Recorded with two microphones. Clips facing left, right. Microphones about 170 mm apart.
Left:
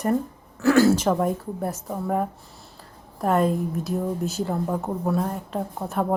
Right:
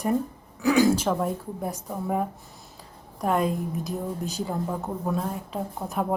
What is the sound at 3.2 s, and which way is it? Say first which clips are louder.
A woman's voice: left 3 dB; centre (ahead or behind).